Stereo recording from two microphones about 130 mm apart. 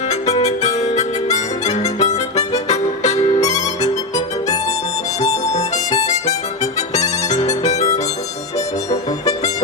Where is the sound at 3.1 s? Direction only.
25° left (ahead or behind).